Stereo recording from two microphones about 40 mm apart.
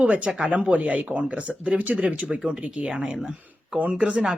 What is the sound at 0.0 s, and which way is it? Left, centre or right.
Speech, right.